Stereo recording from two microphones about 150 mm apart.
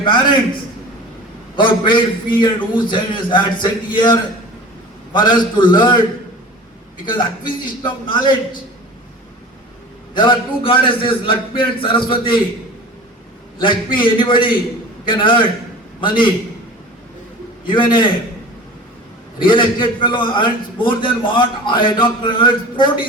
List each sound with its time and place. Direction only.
0.0 s a man's voice: 30° left (ahead or behind)
1.5 s a man's voice: 30° left (ahead or behind)
10.2 s a man's voice: 35° left (ahead or behind)
13.6 s a man's voice: 35° left (ahead or behind)
17.7 s a man's voice: 30° left (ahead or behind)
19.4 s a man's voice: 35° left (ahead or behind)